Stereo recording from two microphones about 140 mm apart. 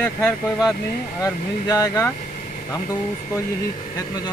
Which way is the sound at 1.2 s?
25° left (ahead or behind).